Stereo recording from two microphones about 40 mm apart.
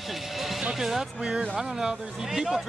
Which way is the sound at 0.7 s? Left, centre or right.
Centre.